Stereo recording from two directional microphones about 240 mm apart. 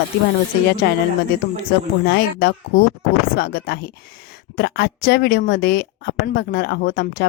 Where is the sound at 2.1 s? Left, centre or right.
Left.